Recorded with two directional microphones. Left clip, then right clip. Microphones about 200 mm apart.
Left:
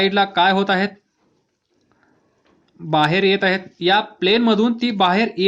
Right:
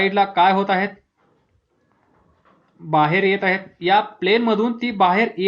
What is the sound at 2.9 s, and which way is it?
Speech, 40° left (ahead or behind).